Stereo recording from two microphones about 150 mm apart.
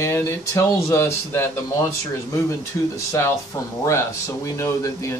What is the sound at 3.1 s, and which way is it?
A man's voice, 20° left (ahead or behind).